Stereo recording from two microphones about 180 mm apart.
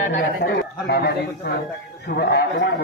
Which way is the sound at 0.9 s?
60° left (ahead or behind).